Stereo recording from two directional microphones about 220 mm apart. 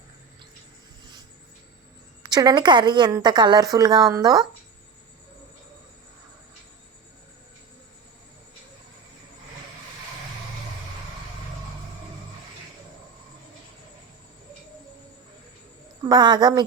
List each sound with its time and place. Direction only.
2.2 s a woman's voice: 20° right (ahead or behind)
16.0 s a woman's voice: 20° right (ahead or behind)